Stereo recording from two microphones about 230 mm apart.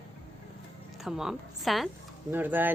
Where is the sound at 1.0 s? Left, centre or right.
Centre.